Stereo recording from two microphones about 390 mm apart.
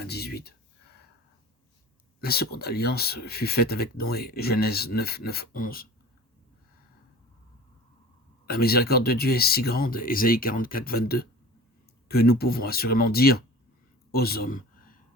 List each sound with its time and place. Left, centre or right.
0.0 s a sound: left
2.2 s speech: left
8.4 s speech: left